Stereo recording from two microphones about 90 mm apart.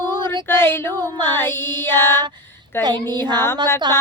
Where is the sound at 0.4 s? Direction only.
25° left (ahead or behind).